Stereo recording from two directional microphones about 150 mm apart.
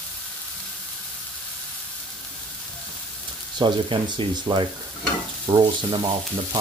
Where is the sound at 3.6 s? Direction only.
35° right (ahead or behind).